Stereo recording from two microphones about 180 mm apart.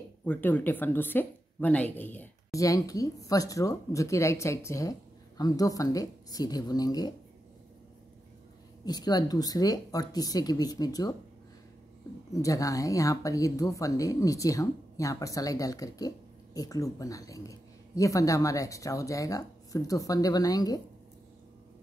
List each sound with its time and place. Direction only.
0.2 s speech: 10° left (ahead or behind)
8.8 s speech: 20° left (ahead or behind)
12.3 s speech: 20° left (ahead or behind)